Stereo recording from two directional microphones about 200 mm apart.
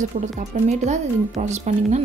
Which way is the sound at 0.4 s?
35° right (ahead or behind).